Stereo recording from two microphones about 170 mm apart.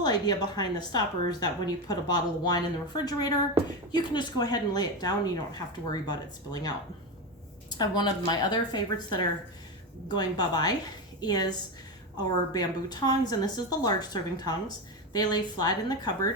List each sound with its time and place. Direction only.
0.0 s a woman's voice: 25° left (ahead or behind)